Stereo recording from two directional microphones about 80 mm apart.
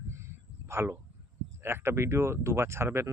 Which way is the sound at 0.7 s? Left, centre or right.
Right.